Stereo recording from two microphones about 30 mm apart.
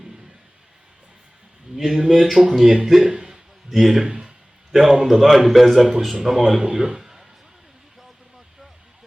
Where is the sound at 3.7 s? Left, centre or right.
Centre.